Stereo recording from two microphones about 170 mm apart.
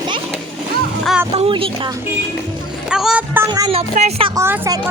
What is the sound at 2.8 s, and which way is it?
Speech, 5° right (ahead or behind).